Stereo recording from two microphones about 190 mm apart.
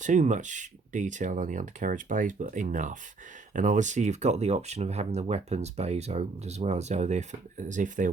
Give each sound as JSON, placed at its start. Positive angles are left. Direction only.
{"t": 0.0, "sound": "speech", "side_deg": -40}